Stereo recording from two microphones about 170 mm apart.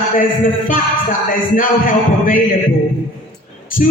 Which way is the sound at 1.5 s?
50° left (ahead or behind).